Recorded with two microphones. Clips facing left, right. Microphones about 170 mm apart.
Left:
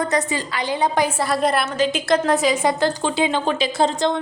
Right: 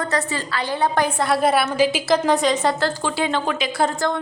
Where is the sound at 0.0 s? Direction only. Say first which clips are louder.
Left 2 dB; 15° left (ahead or behind).